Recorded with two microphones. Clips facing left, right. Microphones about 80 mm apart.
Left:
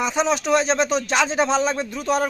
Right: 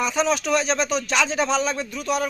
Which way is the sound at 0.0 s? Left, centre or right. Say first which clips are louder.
Left 1 dB; left.